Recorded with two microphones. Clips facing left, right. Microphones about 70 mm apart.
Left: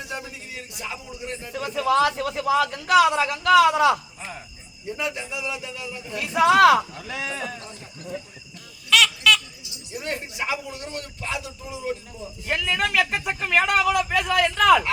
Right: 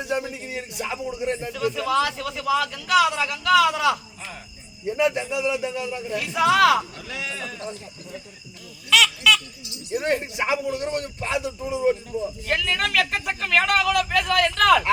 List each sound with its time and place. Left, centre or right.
0.0 s a man's voice: right
1.5 s a man's voice: left
4.9 s a man's voice: right
6.1 s a man's voice: left
8.9 s a sound: centre
9.9 s a man's voice: right
12.5 s speech: centre